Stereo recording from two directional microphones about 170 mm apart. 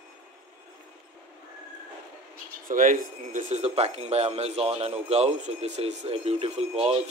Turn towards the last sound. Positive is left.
turn(degrees=-35)  # may be behind; listen again after turning